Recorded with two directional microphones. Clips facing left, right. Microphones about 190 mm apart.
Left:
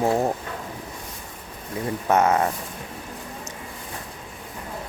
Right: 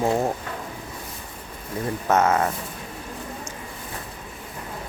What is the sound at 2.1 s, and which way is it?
Speech, 15° left (ahead or behind).